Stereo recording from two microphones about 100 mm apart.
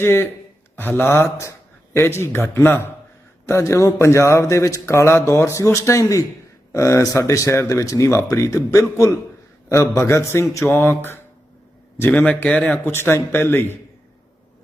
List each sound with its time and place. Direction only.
0.0 s a man's voice: 25° left (ahead or behind)
12.8 s a man's voice: 25° left (ahead or behind)